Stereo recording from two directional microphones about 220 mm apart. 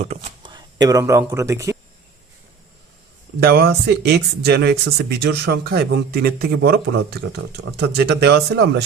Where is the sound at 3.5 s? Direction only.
45° right (ahead or behind).